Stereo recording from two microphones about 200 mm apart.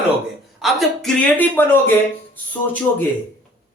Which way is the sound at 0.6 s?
Centre (ahead or behind).